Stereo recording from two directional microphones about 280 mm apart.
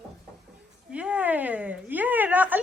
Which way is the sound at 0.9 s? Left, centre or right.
Centre.